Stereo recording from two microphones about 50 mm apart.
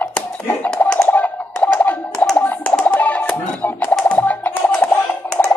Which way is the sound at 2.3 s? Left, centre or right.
Left.